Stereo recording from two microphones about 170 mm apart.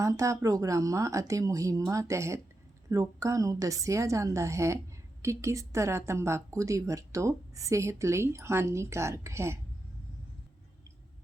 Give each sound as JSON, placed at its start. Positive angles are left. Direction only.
{"t": 0.0, "sound": "speech", "side_deg": -20}